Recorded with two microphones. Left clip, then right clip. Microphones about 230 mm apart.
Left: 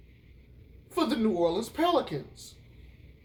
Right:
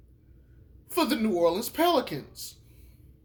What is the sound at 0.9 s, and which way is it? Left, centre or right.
A man's voice, right.